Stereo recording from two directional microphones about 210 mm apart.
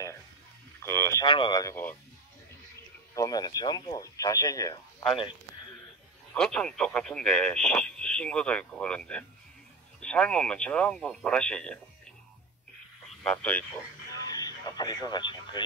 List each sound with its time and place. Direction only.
0.8 s speech: 15° left (ahead or behind)
3.2 s speech: 20° left (ahead or behind)
6.3 s speech: 5° left (ahead or behind)
13.2 s speech: 5° left (ahead or behind)
14.1 s radio: 20° left (ahead or behind)